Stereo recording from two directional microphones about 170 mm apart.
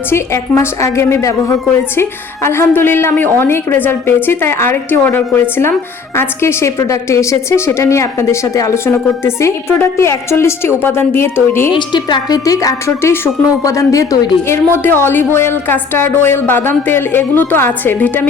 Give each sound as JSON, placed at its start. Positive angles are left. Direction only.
{"t": 0.1, "sound": "a woman's voice", "side_deg": 15}
{"t": 11.7, "sound": "a woman's voice", "side_deg": 25}